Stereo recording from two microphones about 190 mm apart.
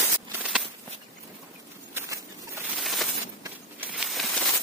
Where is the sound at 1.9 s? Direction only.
15° right (ahead or behind).